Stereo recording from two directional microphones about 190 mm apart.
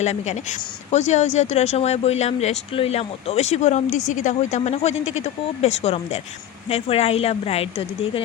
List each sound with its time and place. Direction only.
0.0 s speech: 35° left (ahead or behind)